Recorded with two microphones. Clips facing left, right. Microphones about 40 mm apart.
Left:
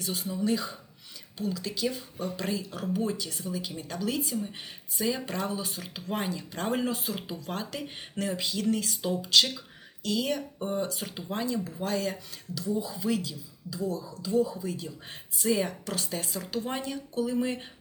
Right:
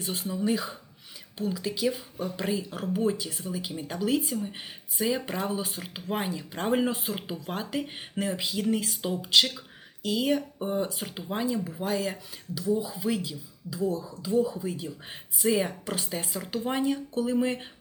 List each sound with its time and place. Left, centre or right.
0.0 s speech: right